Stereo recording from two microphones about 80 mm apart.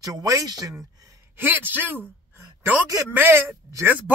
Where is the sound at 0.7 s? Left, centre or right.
Right.